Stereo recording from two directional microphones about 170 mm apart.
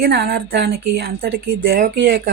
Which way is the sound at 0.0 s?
65° right (ahead or behind).